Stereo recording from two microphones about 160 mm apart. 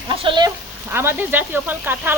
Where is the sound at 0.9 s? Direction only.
15° right (ahead or behind).